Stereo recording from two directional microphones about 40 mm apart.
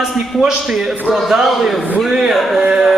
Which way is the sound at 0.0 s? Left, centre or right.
Centre.